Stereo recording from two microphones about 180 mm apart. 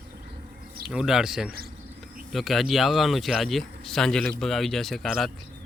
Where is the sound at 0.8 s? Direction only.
5° right (ahead or behind).